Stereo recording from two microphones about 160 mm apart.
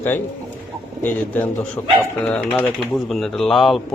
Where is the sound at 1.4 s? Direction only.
10° left (ahead or behind).